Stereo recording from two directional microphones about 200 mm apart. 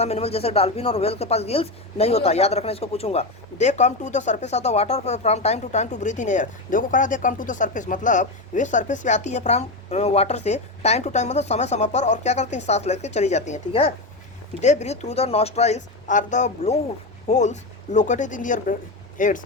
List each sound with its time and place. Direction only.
0.0 s speech: 30° left (ahead or behind)